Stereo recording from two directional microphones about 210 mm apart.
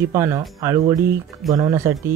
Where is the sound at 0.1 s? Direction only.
15° right (ahead or behind).